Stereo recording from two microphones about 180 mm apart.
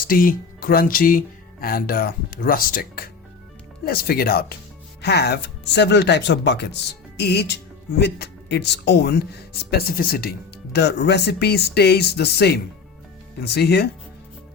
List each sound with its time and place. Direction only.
0.0 s speech: 50° left (ahead or behind)
5.0 s speech: 65° left (ahead or behind)